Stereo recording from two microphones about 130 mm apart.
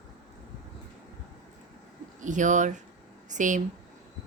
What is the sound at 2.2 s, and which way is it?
Speech, 75° right (ahead or behind).